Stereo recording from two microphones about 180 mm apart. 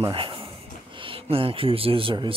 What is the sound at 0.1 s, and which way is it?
Speech, 30° right (ahead or behind).